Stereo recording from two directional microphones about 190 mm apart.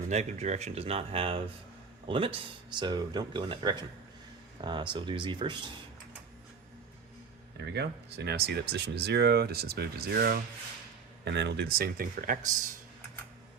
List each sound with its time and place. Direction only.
0.1 s speech: 35° right (ahead or behind)
7.7 s speech: 60° right (ahead or behind); by 12.4 s 45° right (ahead or behind)